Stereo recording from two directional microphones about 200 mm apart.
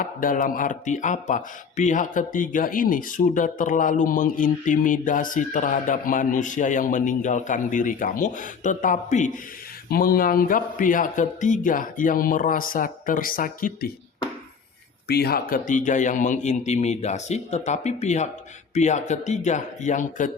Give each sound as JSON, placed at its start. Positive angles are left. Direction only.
{"t": 0.0, "sound": "a man's voice", "side_deg": 45}
{"t": 15.0, "sound": "speech", "side_deg": 55}